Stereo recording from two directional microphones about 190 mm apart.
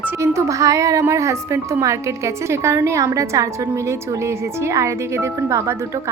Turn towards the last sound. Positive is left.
turn(degrees=-15)  # may be behind; listen again after turning